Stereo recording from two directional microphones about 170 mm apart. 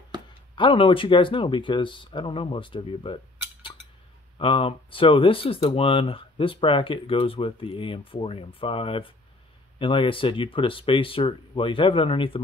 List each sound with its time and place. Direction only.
0.6 s speech: 30° left (ahead or behind)
4.4 s speech: 30° left (ahead or behind)